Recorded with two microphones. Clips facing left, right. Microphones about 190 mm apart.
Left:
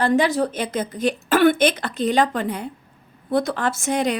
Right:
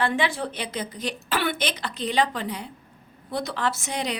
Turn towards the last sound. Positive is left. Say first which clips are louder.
# left 7 dB
turn(degrees=50)  # may be behind; listen again after turning